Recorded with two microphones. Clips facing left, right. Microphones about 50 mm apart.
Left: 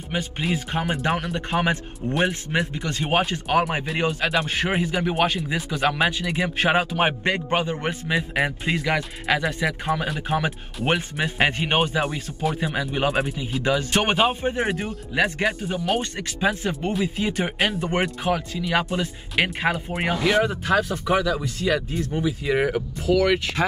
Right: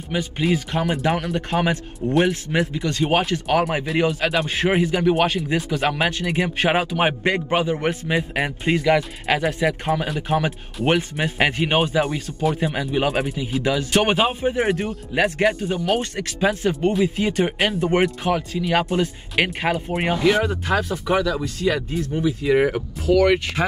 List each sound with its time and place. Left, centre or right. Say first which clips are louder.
0.4 s speech: right 5 dB; centre
2.9 s speech: right 2 dB; centre
7.2 s speech: right 3 dB; centre
7.5 s speech: right 3 dB; centre